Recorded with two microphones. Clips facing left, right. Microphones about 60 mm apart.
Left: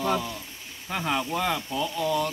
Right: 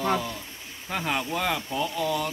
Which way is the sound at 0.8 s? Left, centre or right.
Centre.